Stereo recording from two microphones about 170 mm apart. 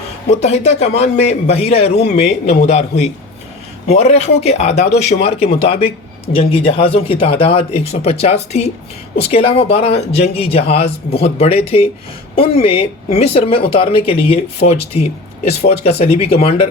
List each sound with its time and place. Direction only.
0.3 s speech: 40° left (ahead or behind)